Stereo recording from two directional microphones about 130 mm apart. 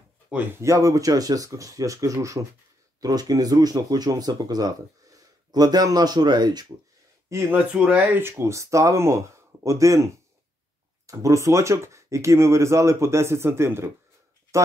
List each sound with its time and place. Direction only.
0.6 s speech: 25° right (ahead or behind)
7.2 s speech: 20° right (ahead or behind)
7.7 s speech: 10° right (ahead or behind)